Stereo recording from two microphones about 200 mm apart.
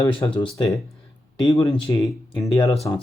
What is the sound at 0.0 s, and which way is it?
Speech, 20° left (ahead or behind).